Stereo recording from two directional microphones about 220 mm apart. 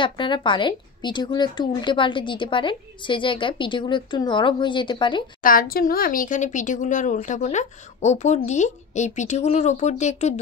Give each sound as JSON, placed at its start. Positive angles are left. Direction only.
{"t": 0.0, "sound": "a woman's voice", "side_deg": 20}
{"t": 5.4, "sound": "speech", "side_deg": 40}